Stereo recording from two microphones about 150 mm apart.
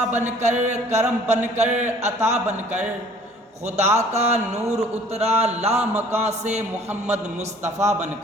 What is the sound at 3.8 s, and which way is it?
Music, 50° right (ahead or behind).